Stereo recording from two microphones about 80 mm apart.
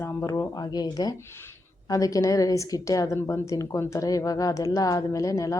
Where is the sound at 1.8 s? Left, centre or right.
Left.